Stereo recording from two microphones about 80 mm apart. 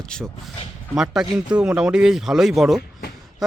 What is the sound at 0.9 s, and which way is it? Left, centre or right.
Speech, centre.